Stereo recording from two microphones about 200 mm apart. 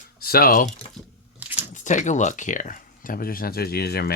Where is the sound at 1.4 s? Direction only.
10° right (ahead or behind).